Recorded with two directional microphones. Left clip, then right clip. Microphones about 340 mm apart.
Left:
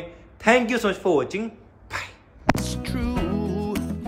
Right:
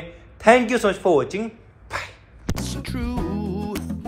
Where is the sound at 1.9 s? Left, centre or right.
Centre.